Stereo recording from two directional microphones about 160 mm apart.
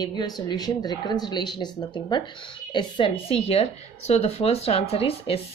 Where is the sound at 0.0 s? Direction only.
25° left (ahead or behind).